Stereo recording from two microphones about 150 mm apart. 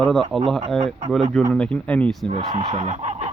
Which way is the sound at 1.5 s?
5° left (ahead or behind).